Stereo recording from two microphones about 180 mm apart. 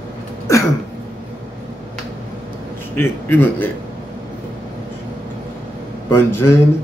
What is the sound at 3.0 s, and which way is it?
Speech, 10° left (ahead or behind).